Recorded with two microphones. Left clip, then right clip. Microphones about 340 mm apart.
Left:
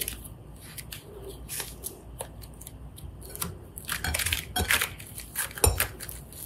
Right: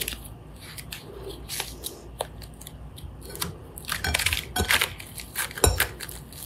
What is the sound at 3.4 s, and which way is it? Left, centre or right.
Coin, centre.